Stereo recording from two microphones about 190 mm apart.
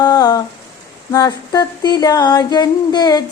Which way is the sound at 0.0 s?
20° left (ahead or behind).